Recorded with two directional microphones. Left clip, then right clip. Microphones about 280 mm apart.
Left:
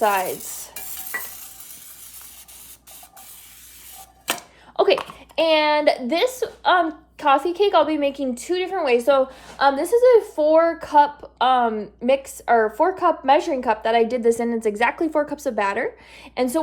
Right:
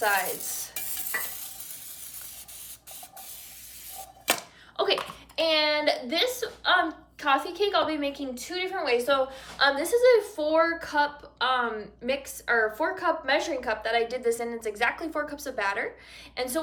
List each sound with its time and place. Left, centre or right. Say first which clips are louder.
0.7 s stir: left 3 dB; centre
4.8 s a woman's voice: left 8 dB; centre